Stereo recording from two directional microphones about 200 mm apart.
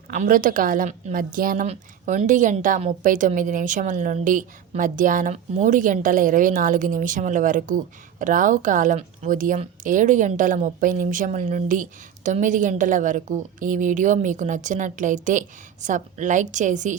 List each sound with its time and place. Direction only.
0.1 s a woman's voice: 40° right (ahead or behind)